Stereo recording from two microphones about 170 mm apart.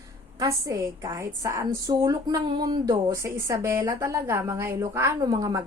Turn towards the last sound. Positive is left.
turn(degrees=-25)  # may be behind; listen again after turning